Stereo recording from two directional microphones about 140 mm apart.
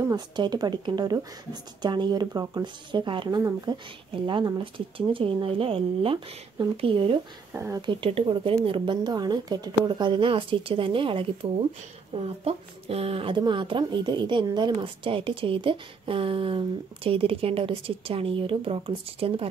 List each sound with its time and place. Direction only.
0.1 s speech: 30° right (ahead or behind)
7.5 s speech: 20° right (ahead or behind)
7.8 s speech: 35° right (ahead or behind)